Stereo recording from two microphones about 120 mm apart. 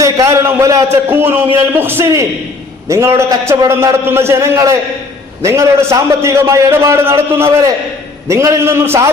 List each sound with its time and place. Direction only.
0.0 s a man's voice: 25° right (ahead or behind)